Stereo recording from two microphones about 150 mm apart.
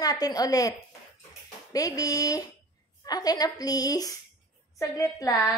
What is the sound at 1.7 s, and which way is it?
A woman's voice, 25° left (ahead or behind).